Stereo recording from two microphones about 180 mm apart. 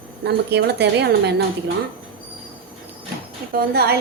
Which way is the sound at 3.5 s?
60° right (ahead or behind).